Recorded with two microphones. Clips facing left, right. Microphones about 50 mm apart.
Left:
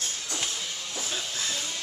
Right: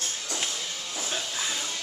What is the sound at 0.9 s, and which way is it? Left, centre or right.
Hiss, centre.